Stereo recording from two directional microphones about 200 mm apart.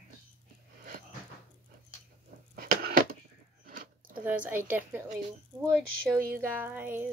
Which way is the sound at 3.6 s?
45° right (ahead or behind).